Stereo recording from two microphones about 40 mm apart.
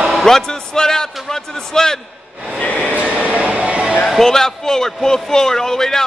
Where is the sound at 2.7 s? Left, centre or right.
Left.